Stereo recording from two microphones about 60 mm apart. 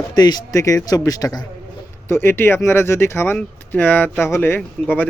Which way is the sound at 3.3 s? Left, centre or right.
Left.